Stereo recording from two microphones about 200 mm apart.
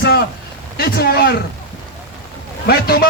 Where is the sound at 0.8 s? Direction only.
50° left (ahead or behind).